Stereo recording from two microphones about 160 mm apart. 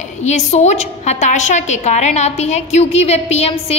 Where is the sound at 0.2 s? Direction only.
45° left (ahead or behind).